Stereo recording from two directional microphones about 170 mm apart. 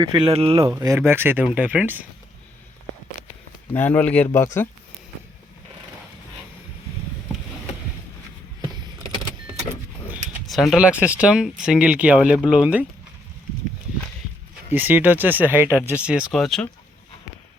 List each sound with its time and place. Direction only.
0.0 s speech: 25° right (ahead or behind)
0.3 s speech: 35° right (ahead or behind)
0.7 s speech: 15° right (ahead or behind)
3.7 s speech: 10° left (ahead or behind)
10.4 s speech: centre (ahead or behind)
14.7 s speech: 10° right (ahead or behind)